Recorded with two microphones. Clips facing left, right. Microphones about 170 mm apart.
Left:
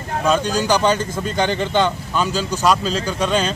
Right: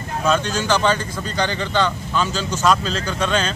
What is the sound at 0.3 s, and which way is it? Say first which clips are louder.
Speech: left 2 dB; 10° left (ahead or behind).